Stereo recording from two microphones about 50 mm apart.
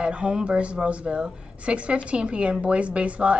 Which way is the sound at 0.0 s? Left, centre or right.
Right.